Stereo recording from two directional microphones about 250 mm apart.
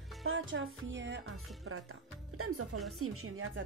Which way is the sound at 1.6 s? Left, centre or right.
Right.